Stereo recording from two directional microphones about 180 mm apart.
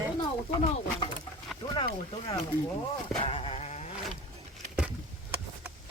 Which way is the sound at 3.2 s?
35° left (ahead or behind).